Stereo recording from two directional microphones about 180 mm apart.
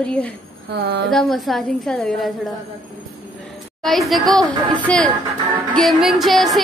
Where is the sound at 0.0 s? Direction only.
5° left (ahead or behind).